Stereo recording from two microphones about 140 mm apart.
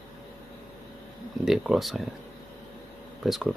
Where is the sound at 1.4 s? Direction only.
Centre (ahead or behind).